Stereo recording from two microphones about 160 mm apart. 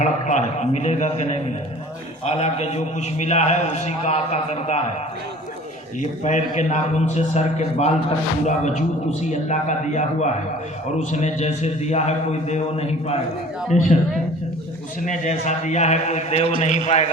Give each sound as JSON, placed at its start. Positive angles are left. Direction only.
{"t": 0.0, "sound": "a man's voice", "side_deg": 45}
{"t": 6.0, "sound": "a man's voice", "side_deg": 50}
{"t": 15.0, "sound": "a man's voice", "side_deg": 50}